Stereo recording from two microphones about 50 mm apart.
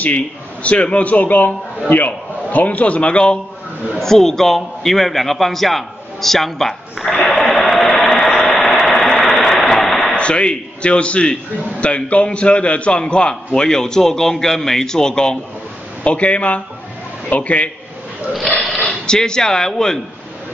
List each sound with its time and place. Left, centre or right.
0.0 s a man's voice: left
4.0 s a man's voice: centre
7.2 s a sound: centre
10.1 s a man's voice: left
19.0 s a man's voice: centre